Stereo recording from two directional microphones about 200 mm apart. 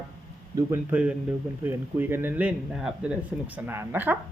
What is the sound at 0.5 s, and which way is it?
Speech, 10° right (ahead or behind).